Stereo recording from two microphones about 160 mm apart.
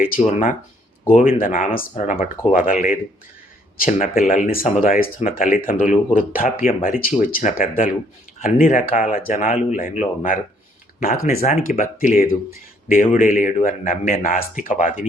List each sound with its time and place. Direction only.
0.2 s speech: 55° left (ahead or behind)
11.0 s speech: 65° left (ahead or behind)
11.3 s speech: 45° left (ahead or behind)